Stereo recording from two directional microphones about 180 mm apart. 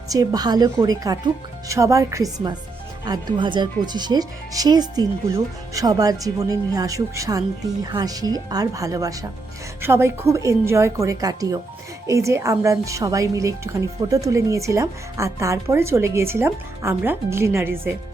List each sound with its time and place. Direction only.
0.1 s a woman's voice: 20° right (ahead or behind)